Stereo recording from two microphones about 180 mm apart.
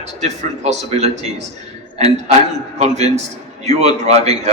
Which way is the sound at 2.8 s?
40° right (ahead or behind).